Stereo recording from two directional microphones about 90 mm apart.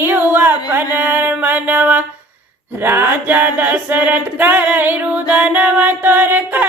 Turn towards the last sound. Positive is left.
turn(degrees=-20)  # may be behind; listen again after turning